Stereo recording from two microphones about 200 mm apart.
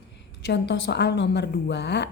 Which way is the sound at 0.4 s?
60° left (ahead or behind).